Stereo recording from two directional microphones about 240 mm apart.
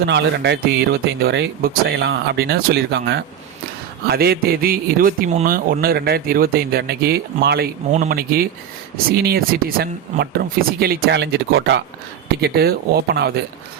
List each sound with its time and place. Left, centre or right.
0.0 s a man's voice: right